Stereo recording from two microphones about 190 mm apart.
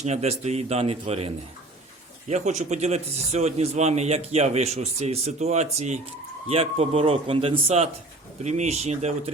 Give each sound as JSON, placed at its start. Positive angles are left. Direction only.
{"t": 0.0, "sound": "a man's voice", "side_deg": -35}